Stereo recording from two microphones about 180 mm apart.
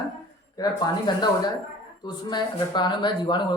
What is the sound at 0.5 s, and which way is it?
Speech, 20° left (ahead or behind).